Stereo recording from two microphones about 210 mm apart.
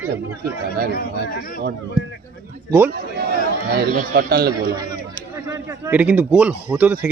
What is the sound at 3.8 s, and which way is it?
Speech, 50° right (ahead or behind).